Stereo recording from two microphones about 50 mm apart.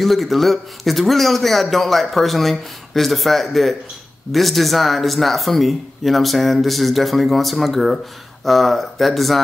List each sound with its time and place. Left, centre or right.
0.0 s speech: centre